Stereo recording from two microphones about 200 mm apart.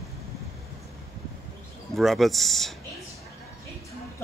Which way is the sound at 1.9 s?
Centre (ahead or behind).